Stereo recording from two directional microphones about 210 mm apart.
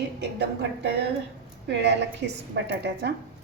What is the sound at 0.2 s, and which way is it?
A woman's voice, 55° right (ahead or behind).